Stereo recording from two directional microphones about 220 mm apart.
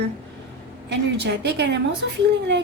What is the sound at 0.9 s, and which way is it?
Speech, 50° right (ahead or behind).